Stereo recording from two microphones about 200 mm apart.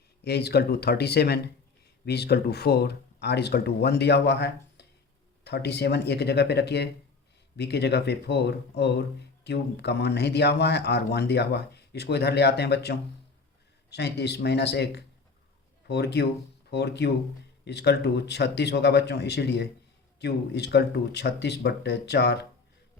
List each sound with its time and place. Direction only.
0.3 s speech: 55° left (ahead or behind)